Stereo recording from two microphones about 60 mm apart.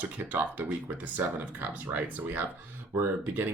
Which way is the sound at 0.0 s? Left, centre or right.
Right.